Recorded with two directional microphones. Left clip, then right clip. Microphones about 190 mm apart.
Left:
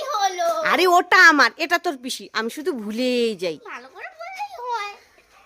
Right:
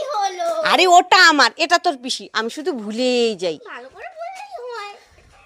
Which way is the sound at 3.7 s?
20° left (ahead or behind).